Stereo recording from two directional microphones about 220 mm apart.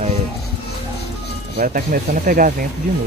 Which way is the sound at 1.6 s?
40° right (ahead or behind).